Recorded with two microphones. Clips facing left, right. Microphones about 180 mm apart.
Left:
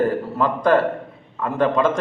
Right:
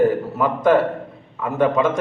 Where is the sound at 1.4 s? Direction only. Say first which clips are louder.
Right 1 dB; 5° right (ahead or behind).